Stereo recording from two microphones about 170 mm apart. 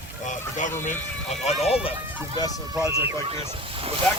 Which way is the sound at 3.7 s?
35° right (ahead or behind).